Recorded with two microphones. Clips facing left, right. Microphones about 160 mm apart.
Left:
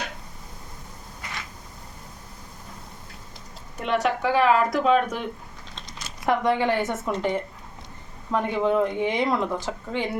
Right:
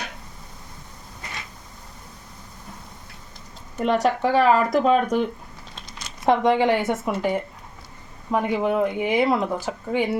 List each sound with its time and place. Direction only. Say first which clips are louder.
3.8 s speech: right 3 dB; 35° right (ahead or behind)
6.2 s speech: right 4 dB; 20° right (ahead or behind)